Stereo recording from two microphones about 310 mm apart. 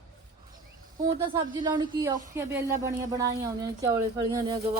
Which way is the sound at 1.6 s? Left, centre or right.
Centre.